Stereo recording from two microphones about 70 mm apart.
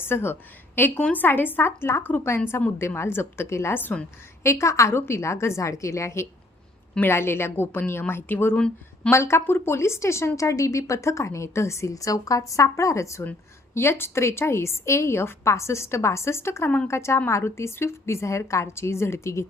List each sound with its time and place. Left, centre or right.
0.0 s a woman's voice: left
0.9 s a woman's voice: left
4.4 s a woman's voice: left